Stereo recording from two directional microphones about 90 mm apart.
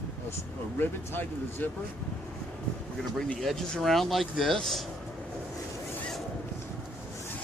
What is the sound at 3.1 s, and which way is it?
Speech, 5° left (ahead or behind).